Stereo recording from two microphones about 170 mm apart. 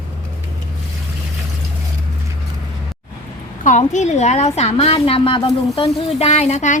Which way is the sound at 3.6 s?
45° left (ahead or behind).